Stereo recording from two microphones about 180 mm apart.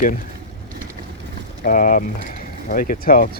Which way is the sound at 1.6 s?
50° left (ahead or behind).